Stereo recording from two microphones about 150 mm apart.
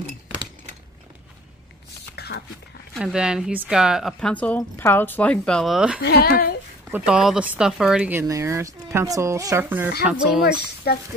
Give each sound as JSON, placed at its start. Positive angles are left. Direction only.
{"t": 2.1, "sound": "a sound", "side_deg": 90}
{"t": 3.0, "sound": "speech", "side_deg": -5}
{"t": 5.9, "sound": "speech", "side_deg": 85}
{"t": 6.9, "sound": "speech", "side_deg": -5}
{"t": 10.9, "sound": "speech", "side_deg": 90}